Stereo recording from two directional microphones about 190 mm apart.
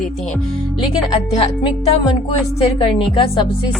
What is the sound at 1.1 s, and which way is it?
A woman's voice, 30° left (ahead or behind).